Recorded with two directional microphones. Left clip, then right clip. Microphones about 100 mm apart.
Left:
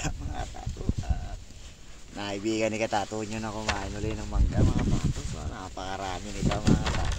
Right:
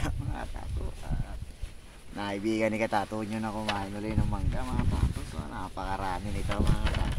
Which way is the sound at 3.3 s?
25° right (ahead or behind).